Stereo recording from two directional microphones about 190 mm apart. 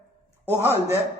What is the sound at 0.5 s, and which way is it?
Speech, 15° right (ahead or behind).